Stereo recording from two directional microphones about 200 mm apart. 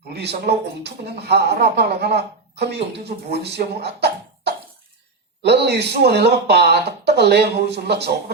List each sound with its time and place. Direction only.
0.1 s speech: 55° right (ahead or behind)